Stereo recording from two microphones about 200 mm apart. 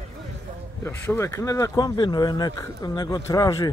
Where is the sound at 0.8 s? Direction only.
10° left (ahead or behind).